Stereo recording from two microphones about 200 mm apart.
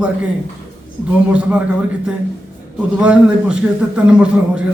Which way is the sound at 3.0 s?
5° right (ahead or behind).